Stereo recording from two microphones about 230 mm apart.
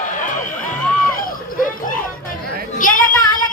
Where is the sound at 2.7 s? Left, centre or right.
Left.